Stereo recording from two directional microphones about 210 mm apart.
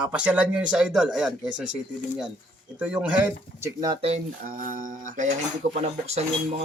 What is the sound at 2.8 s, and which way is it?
Speech, 5° right (ahead or behind).